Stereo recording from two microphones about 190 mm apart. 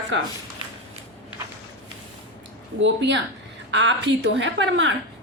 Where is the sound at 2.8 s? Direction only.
70° right (ahead or behind).